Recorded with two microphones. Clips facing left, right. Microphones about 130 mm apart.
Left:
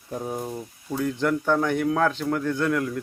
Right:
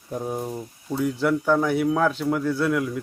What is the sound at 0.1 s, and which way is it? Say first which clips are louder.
Speech: right 2 dB; 5° right (ahead or behind).